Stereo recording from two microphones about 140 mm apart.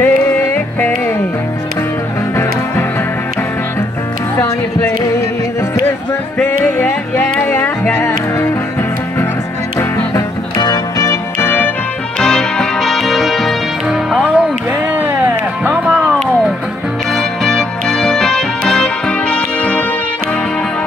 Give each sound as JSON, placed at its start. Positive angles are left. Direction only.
{"t": 0.0, "sound": "music", "side_deg": 15}
{"t": 5.9, "sound": "music", "side_deg": 15}
{"t": 9.8, "sound": "music", "side_deg": 25}
{"t": 17.1, "sound": "music", "side_deg": 5}